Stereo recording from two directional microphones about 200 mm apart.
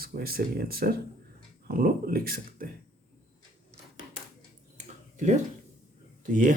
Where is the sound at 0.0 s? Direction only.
50° right (ahead or behind).